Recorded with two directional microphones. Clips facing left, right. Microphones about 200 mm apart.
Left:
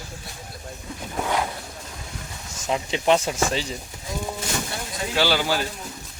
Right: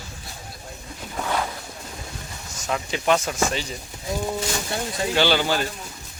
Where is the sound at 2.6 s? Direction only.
25° left (ahead or behind).